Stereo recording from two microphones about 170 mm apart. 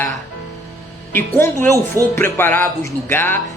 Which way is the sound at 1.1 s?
15° left (ahead or behind).